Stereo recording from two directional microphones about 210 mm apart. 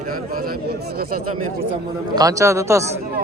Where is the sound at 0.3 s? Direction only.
45° right (ahead or behind).